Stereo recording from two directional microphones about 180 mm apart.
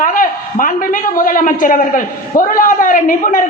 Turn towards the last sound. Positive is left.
turn(degrees=50)  # may be behind; listen again after turning